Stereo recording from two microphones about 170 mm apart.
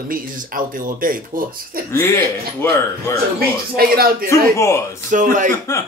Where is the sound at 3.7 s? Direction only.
60° right (ahead or behind).